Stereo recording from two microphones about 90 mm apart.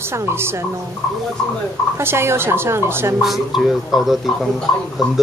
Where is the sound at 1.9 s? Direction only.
30° right (ahead or behind).